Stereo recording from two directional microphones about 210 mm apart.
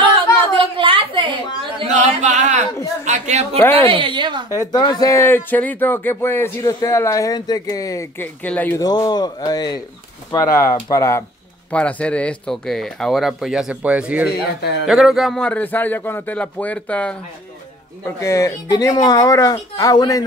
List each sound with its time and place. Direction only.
0.0 s a sound: 25° right (ahead or behind)
1.8 s a woman's voice: 35° right (ahead or behind)
4.5 s speech: 15° left (ahead or behind)